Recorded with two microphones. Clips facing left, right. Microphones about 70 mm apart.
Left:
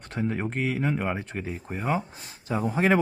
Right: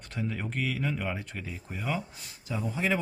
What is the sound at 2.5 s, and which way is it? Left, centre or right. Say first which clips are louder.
Speech: left 7 dB; left.